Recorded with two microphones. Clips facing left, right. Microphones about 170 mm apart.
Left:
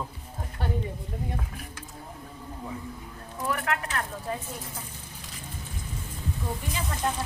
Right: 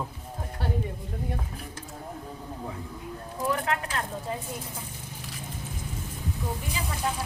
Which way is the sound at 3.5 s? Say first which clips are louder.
Right 1 dB; 30° right (ahead or behind).